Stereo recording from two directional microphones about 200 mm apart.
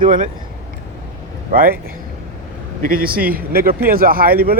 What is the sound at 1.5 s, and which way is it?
Speech, 45° right (ahead or behind).